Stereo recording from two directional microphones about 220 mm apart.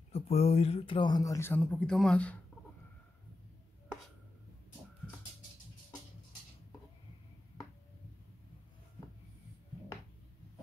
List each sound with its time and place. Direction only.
0.1 s speech: 25° left (ahead or behind); by 2.3 s 5° left (ahead or behind)